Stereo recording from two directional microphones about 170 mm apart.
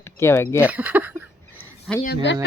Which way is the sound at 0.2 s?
15° left (ahead or behind).